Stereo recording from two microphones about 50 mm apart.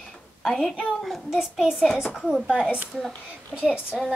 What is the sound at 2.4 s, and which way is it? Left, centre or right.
A child's voice, centre.